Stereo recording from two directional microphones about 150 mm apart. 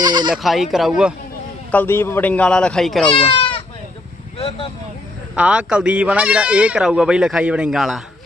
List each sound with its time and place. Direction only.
0.0 s bleat: 30° right (ahead or behind)
0.3 s speech: centre (ahead or behind)
1.7 s a man's voice: 15° left (ahead or behind)
3.2 s speech: 35° left (ahead or behind)
4.4 s vehicle: 40° left (ahead or behind)
5.4 s speech: 5° right (ahead or behind)